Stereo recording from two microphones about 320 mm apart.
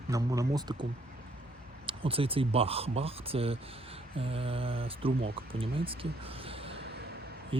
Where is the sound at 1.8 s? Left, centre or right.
Centre.